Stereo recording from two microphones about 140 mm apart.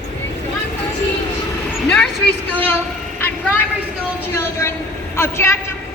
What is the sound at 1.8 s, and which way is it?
Vehicle, 5° left (ahead or behind).